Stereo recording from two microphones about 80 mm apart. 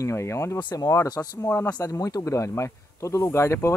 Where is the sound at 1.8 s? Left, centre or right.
Left.